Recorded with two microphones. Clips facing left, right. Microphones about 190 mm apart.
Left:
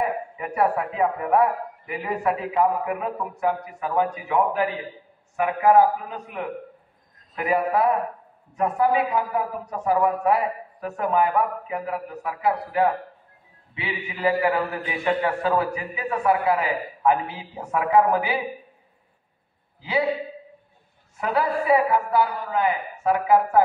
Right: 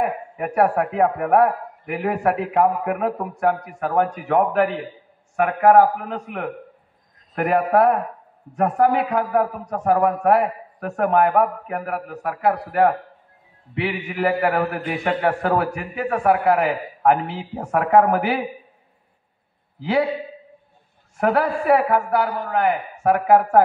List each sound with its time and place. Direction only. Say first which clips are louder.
0.4 s a man's voice: right 5 dB; 60° right (ahead or behind)
21.2 s a man's voice: right 4 dB; 60° right (ahead or behind)